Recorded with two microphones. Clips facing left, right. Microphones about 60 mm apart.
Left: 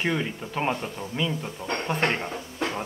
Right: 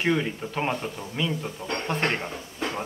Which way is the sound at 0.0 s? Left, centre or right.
Centre.